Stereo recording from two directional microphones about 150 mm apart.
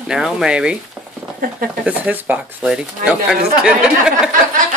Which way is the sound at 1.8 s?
10° right (ahead or behind).